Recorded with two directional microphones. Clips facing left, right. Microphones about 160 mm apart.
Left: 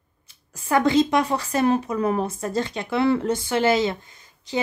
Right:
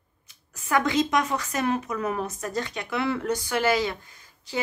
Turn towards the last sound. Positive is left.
turn(degrees=20)  # may be behind; listen again after turning